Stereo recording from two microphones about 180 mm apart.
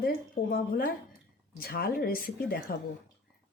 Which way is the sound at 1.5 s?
55° left (ahead or behind).